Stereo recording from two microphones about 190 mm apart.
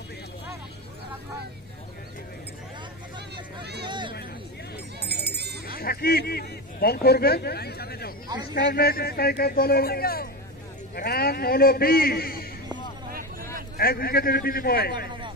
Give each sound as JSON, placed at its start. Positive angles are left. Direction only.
{"t": 3.8, "sound": "vehicle", "side_deg": -25}
{"t": 5.0, "sound": "music", "side_deg": -60}
{"t": 5.7, "sound": "a man's voice", "side_deg": 50}
{"t": 13.7, "sound": "a man's voice", "side_deg": 50}